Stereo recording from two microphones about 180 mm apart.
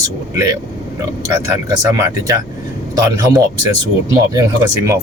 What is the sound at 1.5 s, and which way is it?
Speech, 15° right (ahead or behind).